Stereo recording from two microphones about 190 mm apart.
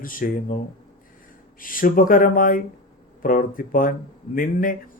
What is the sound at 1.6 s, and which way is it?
Speech, 45° left (ahead or behind).